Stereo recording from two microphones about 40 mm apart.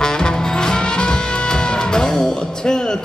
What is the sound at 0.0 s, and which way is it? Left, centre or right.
Music, centre.